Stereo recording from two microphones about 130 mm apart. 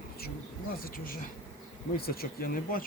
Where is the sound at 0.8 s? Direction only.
90° left.